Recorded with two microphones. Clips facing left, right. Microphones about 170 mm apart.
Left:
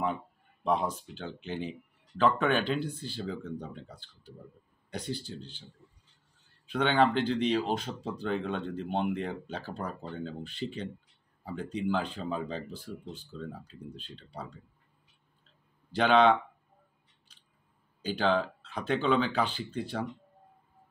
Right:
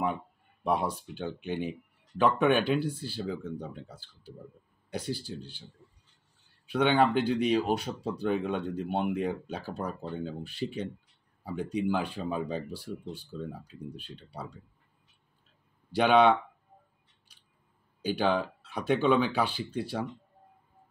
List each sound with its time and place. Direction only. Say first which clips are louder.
0.7 s speech: even; 10° right (ahead or behind)
6.7 s speech: right 1 dB; 10° right (ahead or behind)
15.9 s speech: right 1 dB; 10° right (ahead or behind)
18.0 s speech: even; 10° right (ahead or behind)